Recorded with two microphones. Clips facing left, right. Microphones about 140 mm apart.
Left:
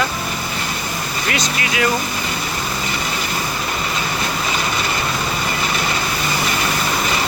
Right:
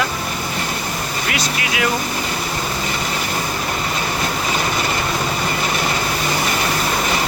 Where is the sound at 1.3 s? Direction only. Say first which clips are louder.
Left 2 dB; 5° right (ahead or behind).